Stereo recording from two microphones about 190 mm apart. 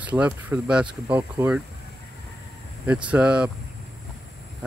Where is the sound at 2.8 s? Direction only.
5° right (ahead or behind).